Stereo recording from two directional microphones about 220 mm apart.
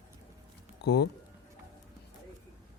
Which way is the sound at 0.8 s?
50° left (ahead or behind).